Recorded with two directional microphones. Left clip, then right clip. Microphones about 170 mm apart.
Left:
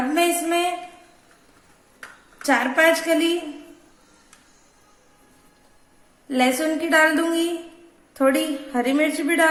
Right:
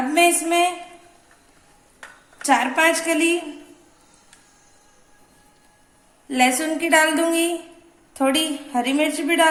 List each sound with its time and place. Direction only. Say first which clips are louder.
0.1 s a woman's voice: right 4 dB; 20° right (ahead or behind)
2.5 s a woman's voice: even; 15° right (ahead or behind)
6.2 s a woman's voice: right 1 dB; 15° right (ahead or behind)